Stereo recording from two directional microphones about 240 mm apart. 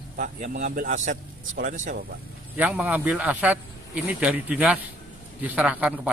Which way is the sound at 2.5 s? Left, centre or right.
Centre.